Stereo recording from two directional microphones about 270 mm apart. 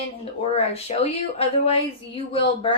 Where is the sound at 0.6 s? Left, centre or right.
Left.